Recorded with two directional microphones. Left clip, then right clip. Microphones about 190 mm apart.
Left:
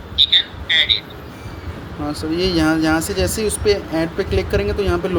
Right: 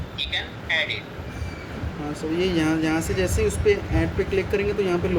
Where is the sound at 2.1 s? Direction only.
30° left (ahead or behind).